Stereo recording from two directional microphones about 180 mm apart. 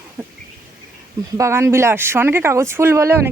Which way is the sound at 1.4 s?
15° right (ahead or behind).